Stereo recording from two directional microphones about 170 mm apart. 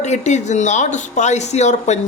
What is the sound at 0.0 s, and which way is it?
Speech, 40° left (ahead or behind).